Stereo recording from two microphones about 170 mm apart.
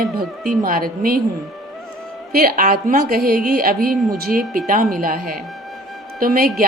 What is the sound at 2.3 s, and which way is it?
A woman's voice, 60° right (ahead or behind).